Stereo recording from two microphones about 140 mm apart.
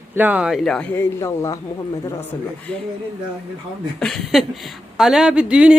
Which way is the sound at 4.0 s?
5° left (ahead or behind).